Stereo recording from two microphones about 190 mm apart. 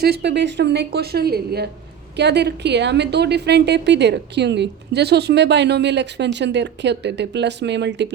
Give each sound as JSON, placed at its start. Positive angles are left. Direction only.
{"t": 0.0, "sound": "a woman's voice", "side_deg": -60}